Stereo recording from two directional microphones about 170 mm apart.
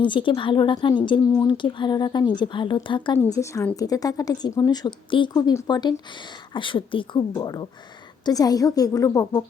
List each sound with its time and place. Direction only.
0.0 s speech: 30° left (ahead or behind)
3.3 s a woman's voice: 15° left (ahead or behind)